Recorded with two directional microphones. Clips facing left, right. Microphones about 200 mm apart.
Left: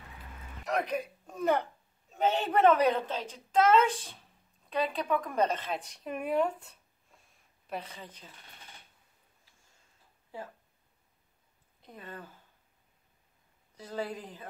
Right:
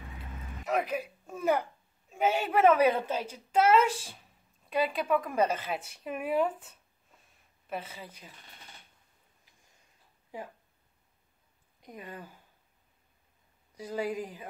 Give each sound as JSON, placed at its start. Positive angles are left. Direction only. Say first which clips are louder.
{"t": 0.7, "sound": "speech", "louder": "right 1 dB", "side_deg": -5}
{"t": 10.3, "sound": "speech", "louder": "right 1 dB", "side_deg": -15}
{"t": 11.8, "sound": "speech", "louder": "right 2 dB", "side_deg": -15}
{"t": 13.7, "sound": "speech", "louder": "right 4 dB", "side_deg": -10}